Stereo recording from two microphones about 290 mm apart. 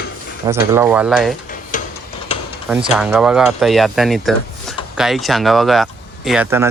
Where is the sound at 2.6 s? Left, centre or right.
Centre.